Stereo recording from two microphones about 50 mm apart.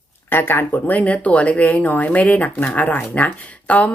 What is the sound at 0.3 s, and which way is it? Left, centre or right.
Speech, left.